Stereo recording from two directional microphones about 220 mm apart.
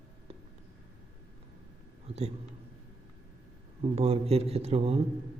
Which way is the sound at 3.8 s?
25° right (ahead or behind).